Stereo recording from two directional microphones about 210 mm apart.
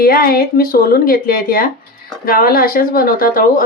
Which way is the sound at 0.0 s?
45° left (ahead or behind).